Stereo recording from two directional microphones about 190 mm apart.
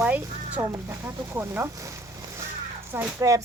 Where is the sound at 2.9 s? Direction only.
15° right (ahead or behind).